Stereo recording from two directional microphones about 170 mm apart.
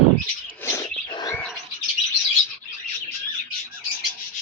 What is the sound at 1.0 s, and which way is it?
Bird, 25° left (ahead or behind).